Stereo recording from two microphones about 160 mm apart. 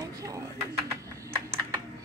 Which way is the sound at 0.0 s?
20° right (ahead or behind).